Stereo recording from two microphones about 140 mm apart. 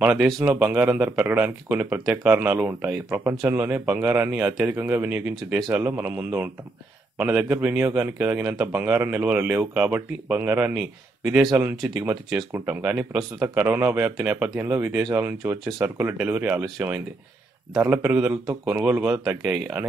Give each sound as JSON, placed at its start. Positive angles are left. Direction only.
{"t": 0.0, "sound": "speech", "side_deg": -5}
{"t": 11.7, "sound": "speech", "side_deg": 0}
{"t": 12.4, "sound": "speech", "side_deg": -15}